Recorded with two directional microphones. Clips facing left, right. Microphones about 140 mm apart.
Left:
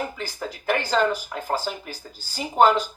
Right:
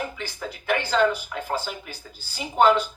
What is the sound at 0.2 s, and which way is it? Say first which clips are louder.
Speech: left 2 dB; 40° left (ahead or behind).